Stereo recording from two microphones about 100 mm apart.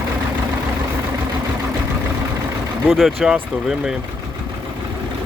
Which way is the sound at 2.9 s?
Centre (ahead or behind).